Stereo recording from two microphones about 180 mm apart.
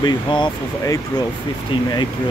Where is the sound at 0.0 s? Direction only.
25° left (ahead or behind).